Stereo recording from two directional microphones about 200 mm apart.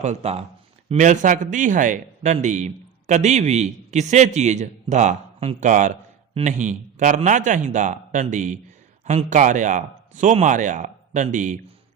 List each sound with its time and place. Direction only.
0.0 s a man's voice: 30° right (ahead or behind)